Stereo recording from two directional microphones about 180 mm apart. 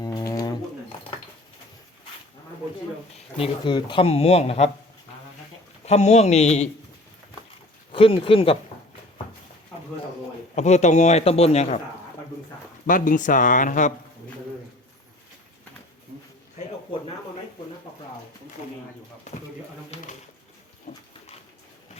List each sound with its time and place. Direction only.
0.0 s pigeon: 20° left (ahead or behind)
3.3 s speech: 30° left (ahead or behind)
5.8 s speech: 35° left (ahead or behind)
7.9 s speech: 30° left (ahead or behind)
10.5 s speech: 40° left (ahead or behind)
12.9 s speech: 45° left (ahead or behind)
19.9 s bird: 35° left (ahead or behind)
20.9 s a sound: 40° left (ahead or behind)